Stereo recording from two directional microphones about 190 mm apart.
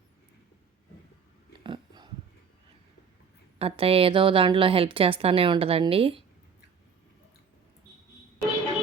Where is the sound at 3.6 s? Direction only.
30° right (ahead or behind).